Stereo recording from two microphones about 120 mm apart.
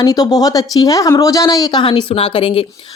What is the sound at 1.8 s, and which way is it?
Speech, 45° left (ahead or behind).